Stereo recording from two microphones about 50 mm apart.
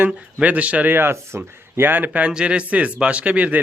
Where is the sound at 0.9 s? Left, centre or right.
Right.